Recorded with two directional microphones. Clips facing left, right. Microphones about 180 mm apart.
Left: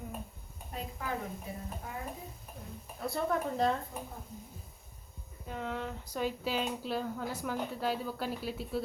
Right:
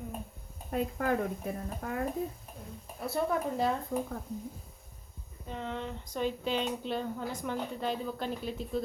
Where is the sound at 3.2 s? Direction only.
10° right (ahead or behind).